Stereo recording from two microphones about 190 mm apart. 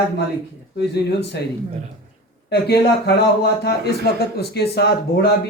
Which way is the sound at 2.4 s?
60° left (ahead or behind).